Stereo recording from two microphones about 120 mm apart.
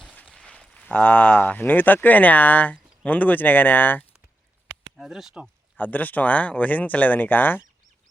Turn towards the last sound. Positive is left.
turn(degrees=15)  # may be behind; listen again after turning